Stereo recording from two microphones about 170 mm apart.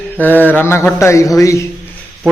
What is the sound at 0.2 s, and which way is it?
A man's voice, 10° left (ahead or behind).